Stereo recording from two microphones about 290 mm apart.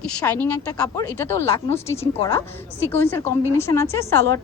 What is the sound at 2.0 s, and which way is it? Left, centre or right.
Speech, left.